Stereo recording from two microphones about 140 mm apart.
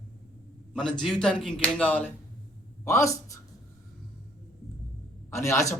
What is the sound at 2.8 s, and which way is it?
Speech, 20° left (ahead or behind).